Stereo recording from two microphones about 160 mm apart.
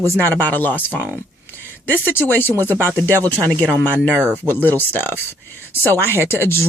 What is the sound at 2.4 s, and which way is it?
Speech, 15° left (ahead or behind).